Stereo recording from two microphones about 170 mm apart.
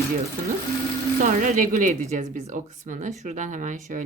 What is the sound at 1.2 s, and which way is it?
Speech, 55° right (ahead or behind).